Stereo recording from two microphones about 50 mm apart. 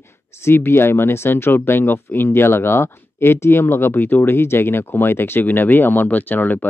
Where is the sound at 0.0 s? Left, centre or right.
Left.